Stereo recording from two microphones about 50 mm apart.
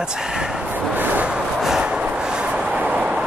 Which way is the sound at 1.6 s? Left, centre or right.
Centre.